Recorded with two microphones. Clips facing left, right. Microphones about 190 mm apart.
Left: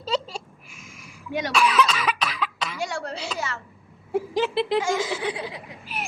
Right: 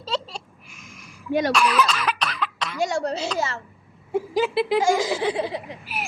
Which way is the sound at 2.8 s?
40° right (ahead or behind).